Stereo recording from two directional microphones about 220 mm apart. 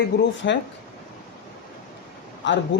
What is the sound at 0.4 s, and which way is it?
Speech, 50° left (ahead or behind).